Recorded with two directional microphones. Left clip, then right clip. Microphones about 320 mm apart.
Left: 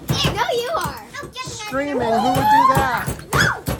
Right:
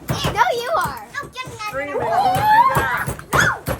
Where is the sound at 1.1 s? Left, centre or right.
Centre.